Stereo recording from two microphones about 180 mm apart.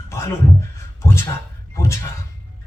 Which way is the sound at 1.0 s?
15° left (ahead or behind).